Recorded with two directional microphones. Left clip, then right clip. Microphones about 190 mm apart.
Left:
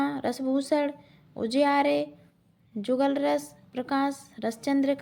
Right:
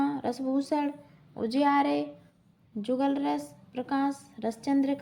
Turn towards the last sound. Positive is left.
turn(degrees=25)  # may be behind; listen again after turning